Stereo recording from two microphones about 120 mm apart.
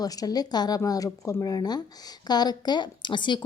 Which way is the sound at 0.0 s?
30° left (ahead or behind).